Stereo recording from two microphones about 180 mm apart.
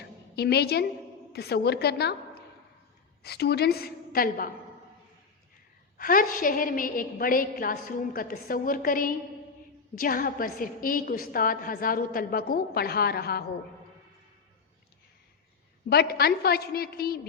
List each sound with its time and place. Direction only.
0.3 s a woman's voice: 65° left (ahead or behind)
3.2 s a woman's voice: 65° left (ahead or behind)
6.0 s a woman's voice: 50° left (ahead or behind)
15.9 s a woman's voice: 60° left (ahead or behind)